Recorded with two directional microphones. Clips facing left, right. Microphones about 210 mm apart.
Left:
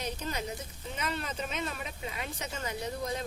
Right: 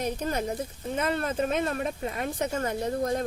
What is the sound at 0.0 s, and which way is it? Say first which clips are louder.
Speech: right 7 dB; 50° right (ahead or behind).